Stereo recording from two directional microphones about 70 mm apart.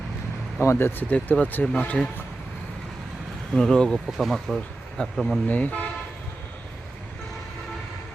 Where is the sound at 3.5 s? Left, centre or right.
Centre.